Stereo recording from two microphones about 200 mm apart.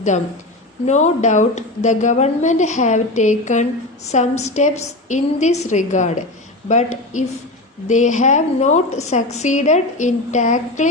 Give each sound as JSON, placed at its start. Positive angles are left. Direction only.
{"t": 0.9, "sound": "a woman's voice", "side_deg": 35}